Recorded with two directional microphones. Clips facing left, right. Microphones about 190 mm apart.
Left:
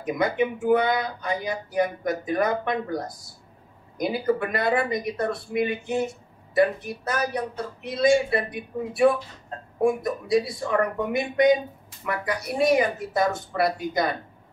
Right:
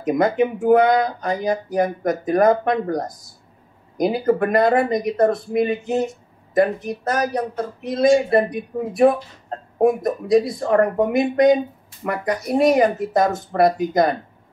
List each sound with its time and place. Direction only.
0.0 s speech: 45° right (ahead or behind)